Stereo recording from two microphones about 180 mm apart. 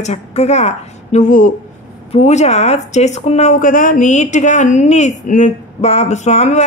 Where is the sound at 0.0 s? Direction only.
35° left (ahead or behind).